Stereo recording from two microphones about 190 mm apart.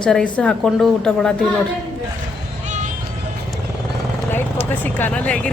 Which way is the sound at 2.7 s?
40° right (ahead or behind).